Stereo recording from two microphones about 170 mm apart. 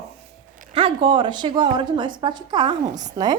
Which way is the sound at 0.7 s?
30° right (ahead or behind).